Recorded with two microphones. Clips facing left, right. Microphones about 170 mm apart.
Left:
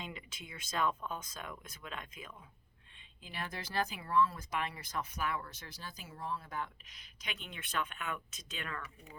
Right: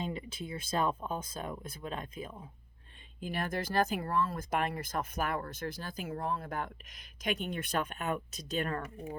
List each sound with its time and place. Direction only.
0.0 s speech: 35° right (ahead or behind)
3.2 s speech: 50° right (ahead or behind)